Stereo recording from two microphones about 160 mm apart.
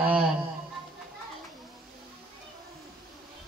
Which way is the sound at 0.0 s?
10° right (ahead or behind).